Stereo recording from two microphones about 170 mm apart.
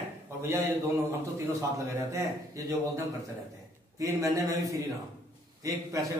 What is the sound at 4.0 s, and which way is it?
Speech, 20° right (ahead or behind).